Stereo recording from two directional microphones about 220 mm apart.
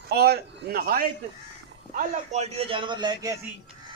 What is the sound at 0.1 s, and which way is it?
Speech, 45° right (ahead or behind).